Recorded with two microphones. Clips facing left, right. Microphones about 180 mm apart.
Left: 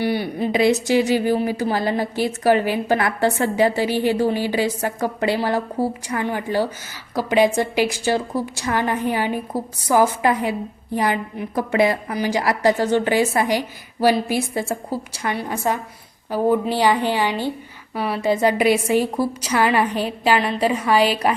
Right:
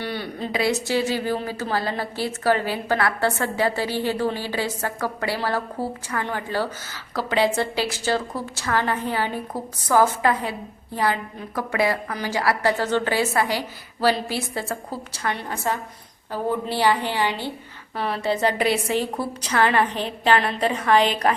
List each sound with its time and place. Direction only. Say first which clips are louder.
0.0 s a woman's voice: left 7 dB; 10° left (ahead or behind)